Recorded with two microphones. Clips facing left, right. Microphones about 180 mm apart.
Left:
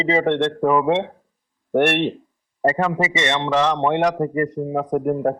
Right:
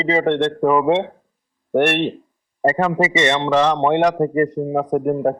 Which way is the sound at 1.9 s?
20° left (ahead or behind).